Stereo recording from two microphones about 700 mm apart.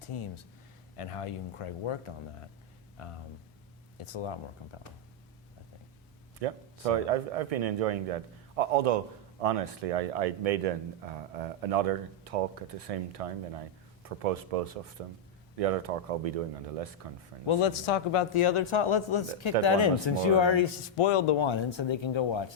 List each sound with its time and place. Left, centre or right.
0.0 s a man's voice: left
6.4 s speech: right
17.4 s a man's voice: left